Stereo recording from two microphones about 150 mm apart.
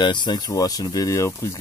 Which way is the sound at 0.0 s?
30° left (ahead or behind).